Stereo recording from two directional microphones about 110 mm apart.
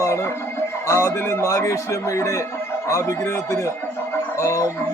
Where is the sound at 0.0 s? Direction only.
25° left (ahead or behind).